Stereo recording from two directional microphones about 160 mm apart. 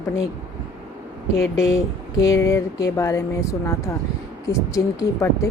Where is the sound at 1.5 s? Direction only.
20° left (ahead or behind).